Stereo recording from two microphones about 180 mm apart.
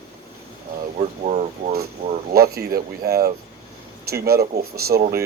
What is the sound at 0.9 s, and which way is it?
Speech, 40° right (ahead or behind).